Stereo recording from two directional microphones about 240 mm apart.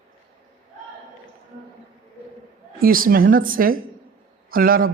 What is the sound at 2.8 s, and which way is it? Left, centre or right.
A man's voice, right.